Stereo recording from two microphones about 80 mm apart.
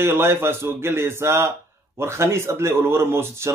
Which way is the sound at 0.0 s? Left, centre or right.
Right.